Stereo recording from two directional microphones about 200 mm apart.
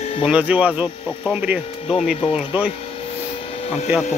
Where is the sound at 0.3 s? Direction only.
5° right (ahead or behind).